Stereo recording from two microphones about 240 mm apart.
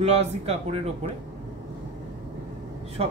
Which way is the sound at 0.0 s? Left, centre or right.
Right.